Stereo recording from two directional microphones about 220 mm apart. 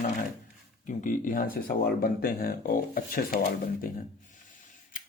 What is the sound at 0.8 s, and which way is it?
Speech, 35° left (ahead or behind).